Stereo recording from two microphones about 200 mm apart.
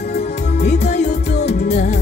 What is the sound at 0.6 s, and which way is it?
Music, 35° left (ahead or behind).